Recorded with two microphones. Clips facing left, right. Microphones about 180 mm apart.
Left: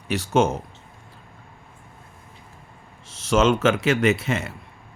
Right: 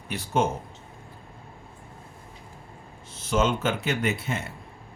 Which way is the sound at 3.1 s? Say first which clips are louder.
Left 5 dB; 85° left.